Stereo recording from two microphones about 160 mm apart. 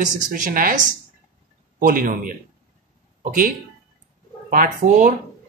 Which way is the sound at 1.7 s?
60° right (ahead or behind).